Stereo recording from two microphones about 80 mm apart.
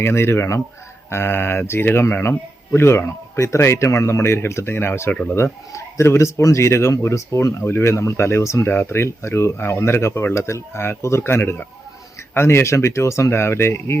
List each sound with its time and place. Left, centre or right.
0.0 s speech: left